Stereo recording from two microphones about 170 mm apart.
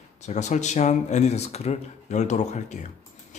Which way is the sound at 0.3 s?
40° left (ahead or behind).